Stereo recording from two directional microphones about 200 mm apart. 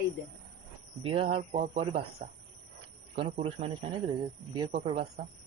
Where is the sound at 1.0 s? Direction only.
30° right (ahead or behind).